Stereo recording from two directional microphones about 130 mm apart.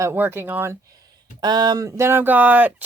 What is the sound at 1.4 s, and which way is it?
Speech, 30° right (ahead or behind).